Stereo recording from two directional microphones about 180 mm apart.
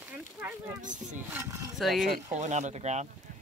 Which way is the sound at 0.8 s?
45° right (ahead or behind).